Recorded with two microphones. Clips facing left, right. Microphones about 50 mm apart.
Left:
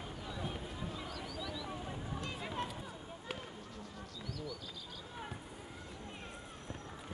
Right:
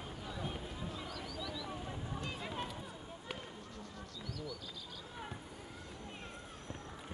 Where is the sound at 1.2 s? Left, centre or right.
Centre.